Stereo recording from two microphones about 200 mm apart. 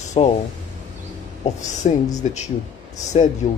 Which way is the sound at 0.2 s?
30° left (ahead or behind).